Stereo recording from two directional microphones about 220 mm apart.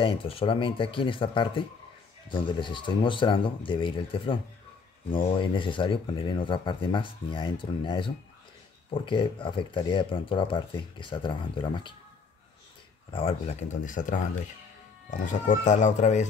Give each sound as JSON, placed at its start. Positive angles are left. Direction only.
{"t": 0.0, "sound": "speech", "side_deg": 25}
{"t": 13.1, "sound": "speech", "side_deg": 25}